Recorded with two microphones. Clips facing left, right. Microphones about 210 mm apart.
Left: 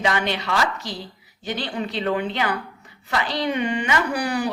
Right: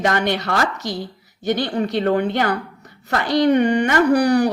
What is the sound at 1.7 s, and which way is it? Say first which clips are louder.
A woman's voice: right 3 dB; 50° right (ahead or behind).